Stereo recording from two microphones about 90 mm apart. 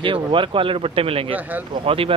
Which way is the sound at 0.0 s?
70° right (ahead or behind).